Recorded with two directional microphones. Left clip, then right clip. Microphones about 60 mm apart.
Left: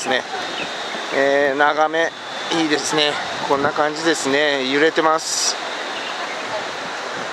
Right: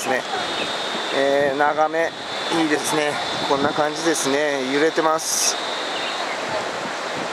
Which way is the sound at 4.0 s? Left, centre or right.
Left.